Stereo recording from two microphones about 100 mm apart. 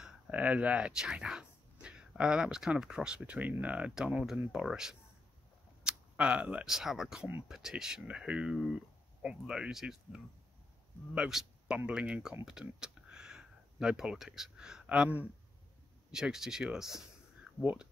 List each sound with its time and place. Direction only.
0.0 s speech: 15° right (ahead or behind)
17.6 s speech: 15° right (ahead or behind)